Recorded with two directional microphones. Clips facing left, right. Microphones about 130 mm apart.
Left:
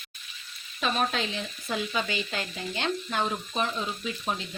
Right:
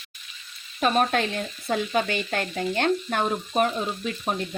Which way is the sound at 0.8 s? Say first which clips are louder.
Right 6 dB; 50° right (ahead or behind).